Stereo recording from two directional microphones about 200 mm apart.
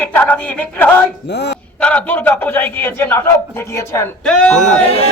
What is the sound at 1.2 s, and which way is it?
Speech, 60° left (ahead or behind).